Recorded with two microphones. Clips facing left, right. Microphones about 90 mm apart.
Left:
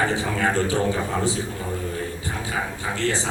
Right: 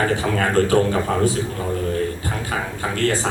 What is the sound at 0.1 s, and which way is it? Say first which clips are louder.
Speech: right 3 dB; 55° right (ahead or behind).